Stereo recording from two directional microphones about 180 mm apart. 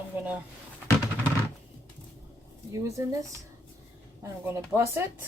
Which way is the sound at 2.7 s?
20° right (ahead or behind).